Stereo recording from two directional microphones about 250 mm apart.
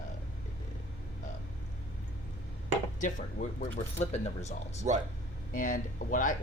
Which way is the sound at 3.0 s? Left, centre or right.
Left.